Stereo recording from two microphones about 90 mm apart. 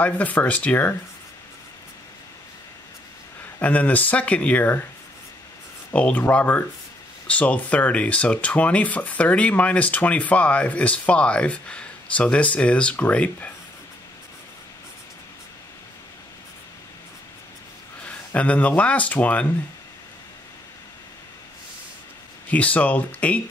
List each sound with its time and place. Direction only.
0.0 s speech: 20° left (ahead or behind)
3.5 s speech: 20° left (ahead or behind)
5.9 s speech: 15° left (ahead or behind)
18.0 s speech: 15° left (ahead or behind)
22.5 s speech: 15° left (ahead or behind)